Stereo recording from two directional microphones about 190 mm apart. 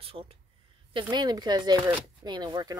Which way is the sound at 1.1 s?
20° right (ahead or behind).